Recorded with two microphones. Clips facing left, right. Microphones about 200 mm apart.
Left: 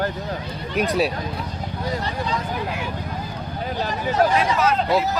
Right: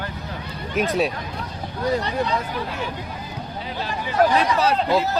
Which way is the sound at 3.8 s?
45° left (ahead or behind).